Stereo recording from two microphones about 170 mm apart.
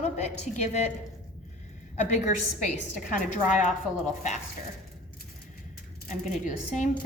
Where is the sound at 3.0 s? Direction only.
50° left (ahead or behind).